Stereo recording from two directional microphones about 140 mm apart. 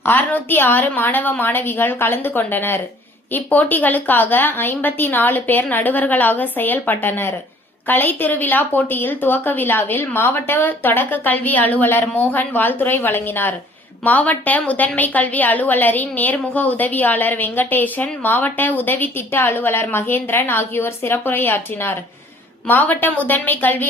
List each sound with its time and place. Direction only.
0.0 s a woman's voice: 15° left (ahead or behind)